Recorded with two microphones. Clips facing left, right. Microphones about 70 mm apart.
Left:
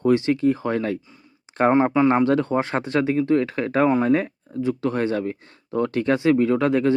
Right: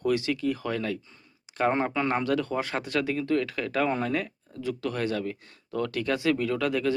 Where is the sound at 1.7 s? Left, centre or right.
Centre.